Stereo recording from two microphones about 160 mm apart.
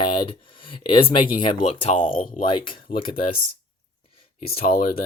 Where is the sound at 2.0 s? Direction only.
60° left (ahead or behind).